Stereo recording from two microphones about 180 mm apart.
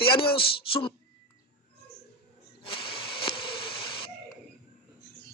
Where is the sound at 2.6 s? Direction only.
30° left (ahead or behind).